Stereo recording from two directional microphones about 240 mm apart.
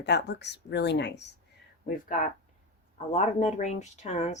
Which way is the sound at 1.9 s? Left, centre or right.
Left.